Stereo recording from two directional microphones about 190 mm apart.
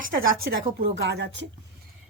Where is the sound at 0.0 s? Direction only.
50° right (ahead or behind); by 1.5 s 70° right (ahead or behind).